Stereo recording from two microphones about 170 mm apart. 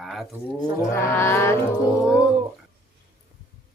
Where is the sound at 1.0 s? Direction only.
15° left (ahead or behind).